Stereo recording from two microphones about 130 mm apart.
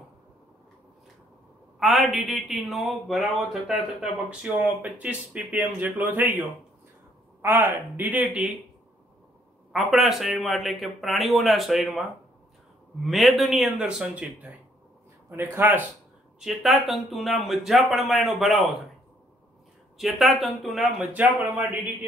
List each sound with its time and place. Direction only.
1.8 s a man's voice: centre (ahead or behind)
7.4 s speech: 15° right (ahead or behind)
9.7 s a man's voice: centre (ahead or behind)
15.5 s speech: 15° right (ahead or behind)
16.3 s a man's voice: centre (ahead or behind)
20.0 s a man's voice: centre (ahead or behind)